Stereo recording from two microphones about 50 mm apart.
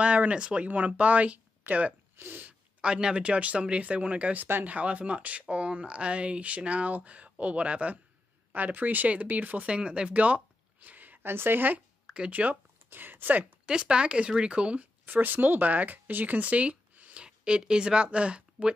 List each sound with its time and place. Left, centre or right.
0.0 s speech: right
2.1 s sneeze: right
2.8 s speech: centre
9.7 s speech: centre; by 11.1 s right
11.2 s speech: right
13.7 s speech: centre
15.0 s speech: right